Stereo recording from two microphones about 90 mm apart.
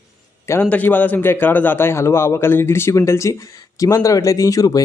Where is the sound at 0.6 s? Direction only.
20° left (ahead or behind).